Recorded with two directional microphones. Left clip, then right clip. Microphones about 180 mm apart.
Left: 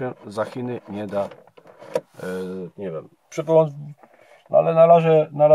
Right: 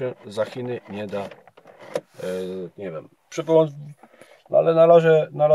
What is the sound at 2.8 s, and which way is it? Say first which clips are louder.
Speech: left 2 dB; 5° right (ahead or behind).